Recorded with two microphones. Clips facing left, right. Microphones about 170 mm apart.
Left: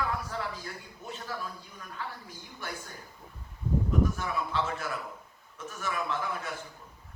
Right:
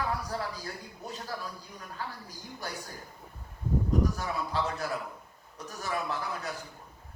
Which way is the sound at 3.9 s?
35° right (ahead or behind).